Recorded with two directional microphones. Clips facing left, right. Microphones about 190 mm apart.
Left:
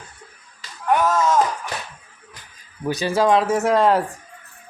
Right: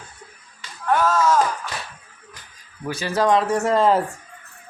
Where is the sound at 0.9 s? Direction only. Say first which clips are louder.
Even; 20° left (ahead or behind).